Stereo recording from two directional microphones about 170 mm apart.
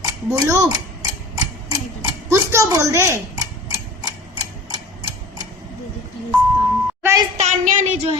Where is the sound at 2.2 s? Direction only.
15° right (ahead or behind).